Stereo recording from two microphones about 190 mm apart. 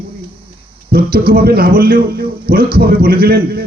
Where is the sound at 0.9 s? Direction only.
50° right (ahead or behind).